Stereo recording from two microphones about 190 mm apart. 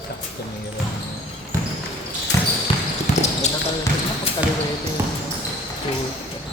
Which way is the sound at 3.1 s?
40° left (ahead or behind).